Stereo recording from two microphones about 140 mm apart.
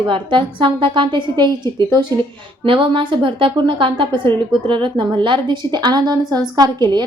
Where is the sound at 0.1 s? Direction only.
35° right (ahead or behind).